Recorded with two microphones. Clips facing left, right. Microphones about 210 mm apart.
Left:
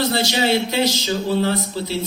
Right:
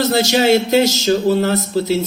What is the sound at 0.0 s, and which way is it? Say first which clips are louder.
Speech: right 5 dB; 45° right (ahead or behind).